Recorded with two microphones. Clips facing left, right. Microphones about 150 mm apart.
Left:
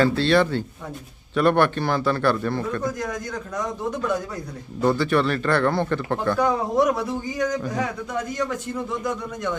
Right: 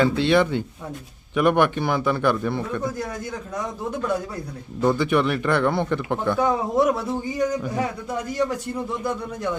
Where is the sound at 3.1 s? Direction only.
30° right (ahead or behind).